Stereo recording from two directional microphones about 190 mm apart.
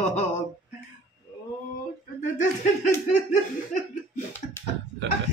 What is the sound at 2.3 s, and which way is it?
Speech, 40° left (ahead or behind).